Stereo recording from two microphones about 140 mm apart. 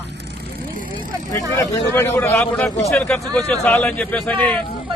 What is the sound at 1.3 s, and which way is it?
A man's voice, 20° left (ahead or behind).